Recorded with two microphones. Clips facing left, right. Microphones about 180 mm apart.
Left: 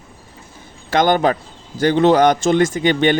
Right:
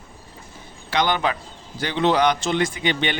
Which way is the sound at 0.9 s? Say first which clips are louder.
Left 7 dB; 45° left (ahead or behind).